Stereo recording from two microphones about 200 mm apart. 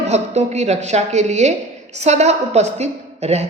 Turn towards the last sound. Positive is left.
turn(degrees=-30)  # may be behind; listen again after turning